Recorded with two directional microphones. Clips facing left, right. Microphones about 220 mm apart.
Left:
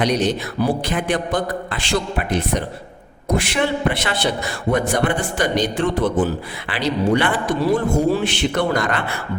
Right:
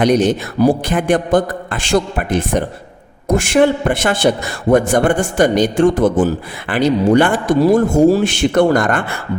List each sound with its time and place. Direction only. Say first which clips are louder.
0.0 s a man's voice: right 6 dB; 50° right (ahead or behind)